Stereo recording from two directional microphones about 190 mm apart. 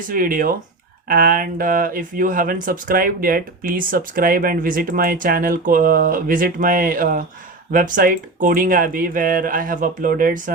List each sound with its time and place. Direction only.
0.1 s speech: 45° right (ahead or behind)